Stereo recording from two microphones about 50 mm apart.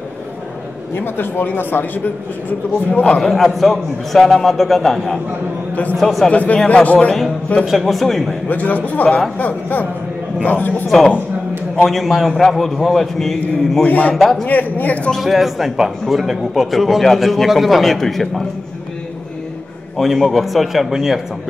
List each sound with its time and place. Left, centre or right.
0.9 s speech: left
2.9 s speech: left
3.2 s a man's voice: centre
6.3 s speech: left
7.6 s a man's voice: centre
8.5 s a man's voice: left
11.8 s a man's voice: centre
13.8 s a man's voice: left
14.1 s a man's voice: centre
14.4 s a man's voice: left
15.1 s a man's voice: centre
20.0 s a man's voice: centre